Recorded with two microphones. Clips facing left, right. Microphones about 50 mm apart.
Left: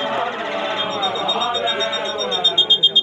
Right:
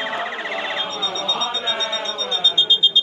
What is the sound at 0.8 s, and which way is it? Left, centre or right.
Music, left.